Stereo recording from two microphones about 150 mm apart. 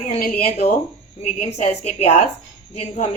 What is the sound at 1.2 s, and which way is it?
A woman's voice, 45° left (ahead or behind).